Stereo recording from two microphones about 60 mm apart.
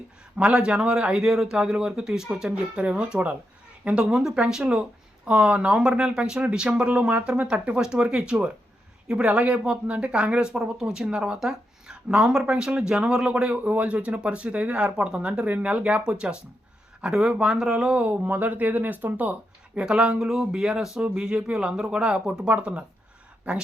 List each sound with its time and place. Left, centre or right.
0.3 s speech: centre
4.0 s speech: centre
18.2 s speech: right
19.8 s speech: centre